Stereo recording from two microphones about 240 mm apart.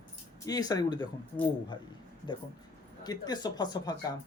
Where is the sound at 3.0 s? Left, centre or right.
Centre.